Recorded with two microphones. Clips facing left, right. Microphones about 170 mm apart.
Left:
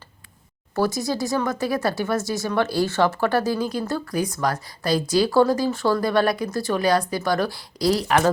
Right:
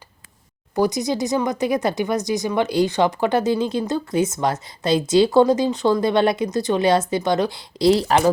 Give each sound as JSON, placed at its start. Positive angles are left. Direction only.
{"t": 0.8, "sound": "a woman's voice", "side_deg": -20}